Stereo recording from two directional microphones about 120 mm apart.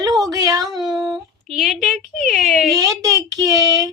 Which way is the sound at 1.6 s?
Centre (ahead or behind).